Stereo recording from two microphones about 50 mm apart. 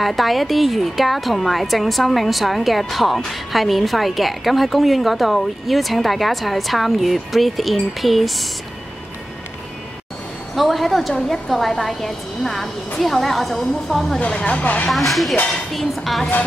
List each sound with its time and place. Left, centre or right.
0.0 s a woman's voice: centre
10.5 s a woman's voice: centre
14.2 s speech: left
14.9 s a woman's voice: centre